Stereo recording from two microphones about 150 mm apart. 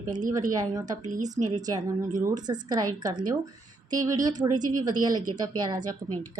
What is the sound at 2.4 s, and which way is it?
Speech, 30° right (ahead or behind).